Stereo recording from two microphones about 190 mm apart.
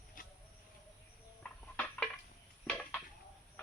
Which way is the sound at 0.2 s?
45° left (ahead or behind).